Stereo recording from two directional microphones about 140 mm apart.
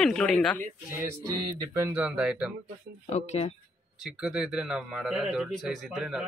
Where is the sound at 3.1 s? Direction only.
50° left (ahead or behind).